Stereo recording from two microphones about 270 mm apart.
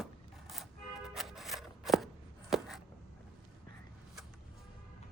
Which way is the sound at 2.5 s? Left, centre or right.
Centre.